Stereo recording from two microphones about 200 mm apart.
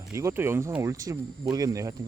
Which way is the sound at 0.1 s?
15° right (ahead or behind).